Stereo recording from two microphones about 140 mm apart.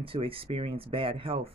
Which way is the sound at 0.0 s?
40° right (ahead or behind).